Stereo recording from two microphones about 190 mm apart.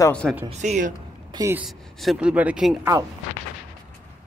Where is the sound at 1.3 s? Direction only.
15° right (ahead or behind).